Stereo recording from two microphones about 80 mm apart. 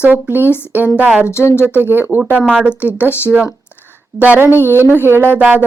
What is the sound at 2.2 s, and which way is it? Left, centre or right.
Speech, centre.